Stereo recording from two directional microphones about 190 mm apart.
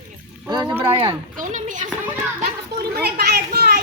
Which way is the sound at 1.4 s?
40° right (ahead or behind).